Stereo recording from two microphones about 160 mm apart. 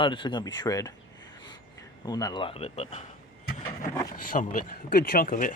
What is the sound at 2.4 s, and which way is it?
Speech, 40° left (ahead or behind).